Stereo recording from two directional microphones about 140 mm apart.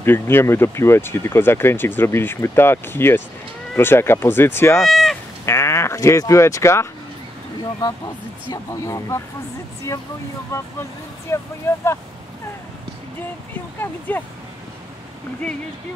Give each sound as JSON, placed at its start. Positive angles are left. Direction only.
{"t": 0.0, "sound": "speech", "side_deg": 15}
{"t": 4.8, "sound": "cat", "side_deg": 0}
{"t": 5.4, "sound": "speech", "side_deg": 20}
{"t": 10.5, "sound": "speech", "side_deg": 20}
{"t": 13.7, "sound": "speech", "side_deg": 15}